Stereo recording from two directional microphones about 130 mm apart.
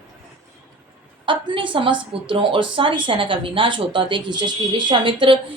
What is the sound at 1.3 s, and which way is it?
A woman's voice, 40° right (ahead or behind).